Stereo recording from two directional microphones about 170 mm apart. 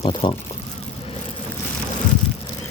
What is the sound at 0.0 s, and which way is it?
Speech, 30° left (ahead or behind).